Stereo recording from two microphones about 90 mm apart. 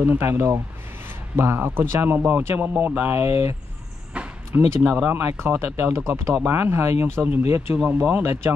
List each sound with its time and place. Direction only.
0.0 s speech: 25° right (ahead or behind)
7.8 s speech: 15° right (ahead or behind)